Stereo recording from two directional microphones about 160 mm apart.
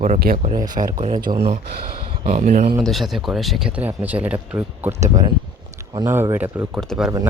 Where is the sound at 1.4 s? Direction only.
90° right.